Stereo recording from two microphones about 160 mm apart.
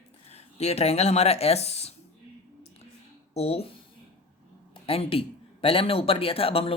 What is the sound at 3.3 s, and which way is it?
Speech, 40° left (ahead or behind).